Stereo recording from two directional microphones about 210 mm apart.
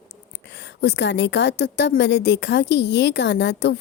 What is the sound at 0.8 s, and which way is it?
A woman's voice, 55° left (ahead or behind).